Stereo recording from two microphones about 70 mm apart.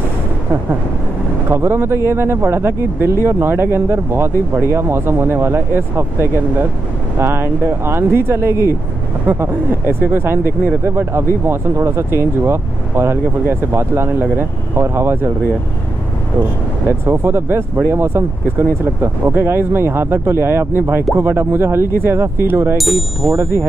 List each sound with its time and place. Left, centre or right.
1.5 s speech: right
16.8 s speech: right
22.8 s speech: centre
23.3 s speech: right